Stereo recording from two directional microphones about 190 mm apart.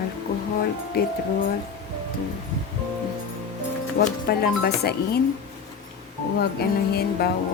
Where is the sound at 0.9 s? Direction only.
55° left (ahead or behind).